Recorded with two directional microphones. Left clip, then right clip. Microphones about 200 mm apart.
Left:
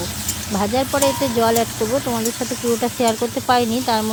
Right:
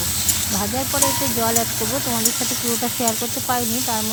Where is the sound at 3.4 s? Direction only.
30° left (ahead or behind).